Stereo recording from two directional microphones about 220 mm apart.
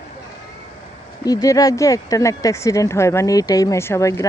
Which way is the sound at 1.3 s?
15° left (ahead or behind).